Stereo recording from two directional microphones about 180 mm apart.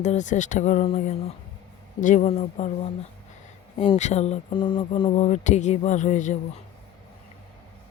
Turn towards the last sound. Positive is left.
turn(degrees=45)  # may be behind; listen again after turning